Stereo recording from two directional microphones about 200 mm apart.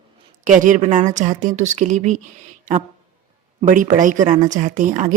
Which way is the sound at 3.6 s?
40° right (ahead or behind).